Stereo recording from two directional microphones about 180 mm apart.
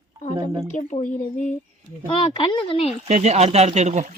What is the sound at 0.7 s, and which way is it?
Speech, 45° left (ahead or behind).